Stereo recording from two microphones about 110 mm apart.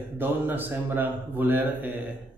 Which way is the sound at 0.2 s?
20° right (ahead or behind).